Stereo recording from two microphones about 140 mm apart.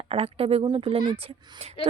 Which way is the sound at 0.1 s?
45° right (ahead or behind).